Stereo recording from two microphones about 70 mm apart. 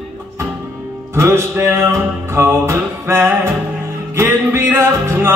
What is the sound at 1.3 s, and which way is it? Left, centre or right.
Music, right.